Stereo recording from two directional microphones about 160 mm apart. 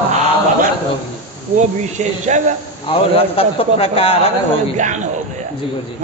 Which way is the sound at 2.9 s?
35° left (ahead or behind).